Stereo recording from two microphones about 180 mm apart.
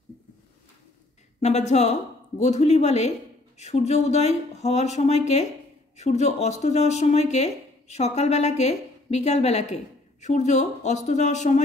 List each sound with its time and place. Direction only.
1.4 s a woman's voice: 40° left (ahead or behind)